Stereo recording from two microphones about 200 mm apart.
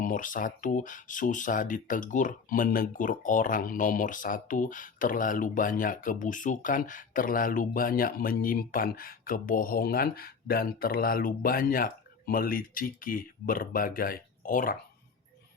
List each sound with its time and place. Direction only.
0.0 s speech: 40° left (ahead or behind)